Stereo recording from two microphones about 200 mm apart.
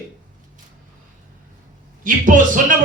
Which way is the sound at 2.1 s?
40° right (ahead or behind).